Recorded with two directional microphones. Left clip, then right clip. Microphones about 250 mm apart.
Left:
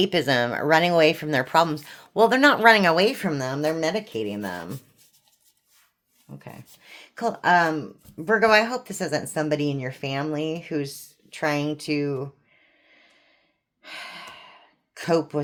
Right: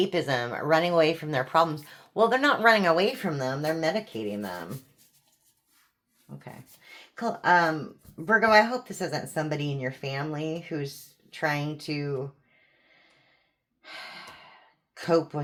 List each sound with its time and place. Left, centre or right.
0.0 s speech: left
6.3 s speech: left
13.8 s gasp: left
14.9 s speech: left